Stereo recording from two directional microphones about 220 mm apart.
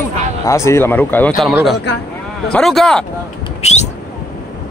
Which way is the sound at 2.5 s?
Centre (ahead or behind).